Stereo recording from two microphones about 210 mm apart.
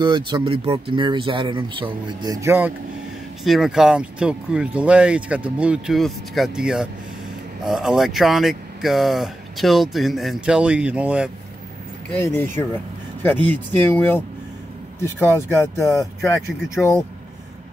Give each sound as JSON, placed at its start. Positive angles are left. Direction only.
{"t": 0.0, "sound": "speech", "side_deg": -20}
{"t": 3.4, "sound": "speech", "side_deg": 0}
{"t": 13.2, "sound": "speech", "side_deg": 10}